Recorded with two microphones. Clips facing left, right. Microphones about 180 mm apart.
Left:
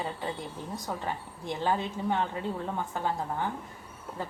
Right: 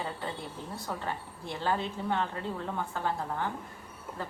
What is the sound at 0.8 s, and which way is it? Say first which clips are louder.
A woman's voice: left 1 dB; 20° left (ahead or behind).